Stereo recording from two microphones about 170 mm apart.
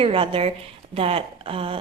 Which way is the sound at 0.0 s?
30° right (ahead or behind).